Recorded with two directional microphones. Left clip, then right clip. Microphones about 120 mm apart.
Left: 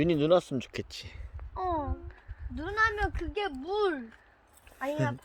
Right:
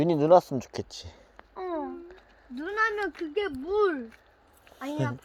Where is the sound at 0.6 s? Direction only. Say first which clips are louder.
Right 2 dB; 50° left (ahead or behind).